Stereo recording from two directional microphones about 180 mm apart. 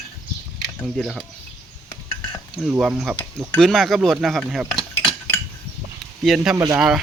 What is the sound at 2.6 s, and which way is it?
Speech, 5° right (ahead or behind).